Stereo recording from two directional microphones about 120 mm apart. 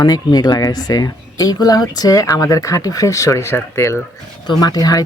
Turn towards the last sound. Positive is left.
turn(degrees=30)  # may be behind; listen again after turning